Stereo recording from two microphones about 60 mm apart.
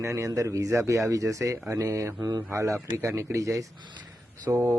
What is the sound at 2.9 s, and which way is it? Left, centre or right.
Speech, right.